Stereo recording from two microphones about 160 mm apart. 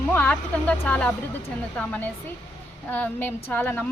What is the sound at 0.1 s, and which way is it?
A woman's voice, 10° left (ahead or behind).